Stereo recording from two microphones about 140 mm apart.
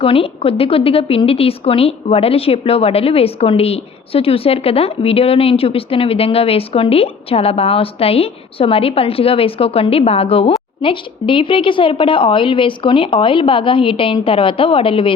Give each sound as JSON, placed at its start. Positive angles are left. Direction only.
{"t": 0.0, "sound": "a woman's voice", "side_deg": 40}